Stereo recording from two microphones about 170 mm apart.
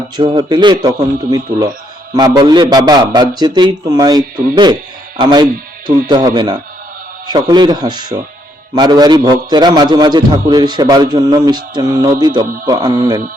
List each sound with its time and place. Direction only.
0.2 s a man's voice: 25° right (ahead or behind)